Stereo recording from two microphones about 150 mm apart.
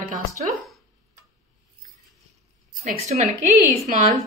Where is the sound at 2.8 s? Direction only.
50° right (ahead or behind).